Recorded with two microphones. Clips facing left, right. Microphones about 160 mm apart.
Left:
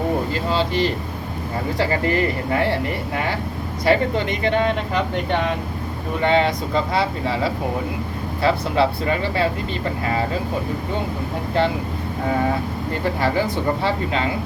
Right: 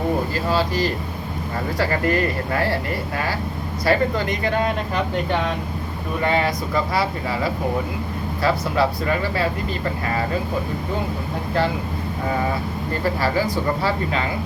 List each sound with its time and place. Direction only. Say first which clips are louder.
0.3 s speech: even; 25° left (ahead or behind)
3.8 s speech: left 1 dB; 25° left (ahead or behind)
6.2 s speech: left 3 dB; 25° left (ahead or behind)
12.9 s speech: even; 20° left (ahead or behind)